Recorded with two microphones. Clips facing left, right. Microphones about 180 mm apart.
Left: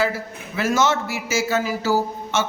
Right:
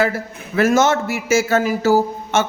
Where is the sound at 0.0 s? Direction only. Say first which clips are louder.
Right 3 dB; 55° right (ahead or behind).